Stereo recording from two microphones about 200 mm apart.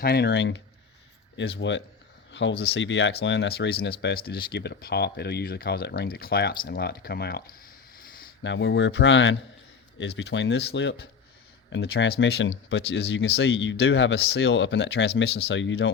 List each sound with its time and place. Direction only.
0.0 s speech: 55° left (ahead or behind)
8.4 s speech: 65° left (ahead or behind)